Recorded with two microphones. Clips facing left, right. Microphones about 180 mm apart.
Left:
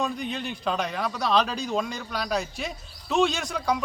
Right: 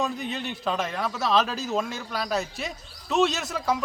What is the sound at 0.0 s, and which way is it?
A man's voice, centre (ahead or behind).